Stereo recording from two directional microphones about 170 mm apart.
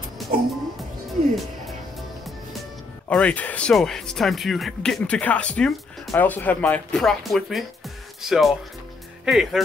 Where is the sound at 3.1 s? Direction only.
5° left (ahead or behind).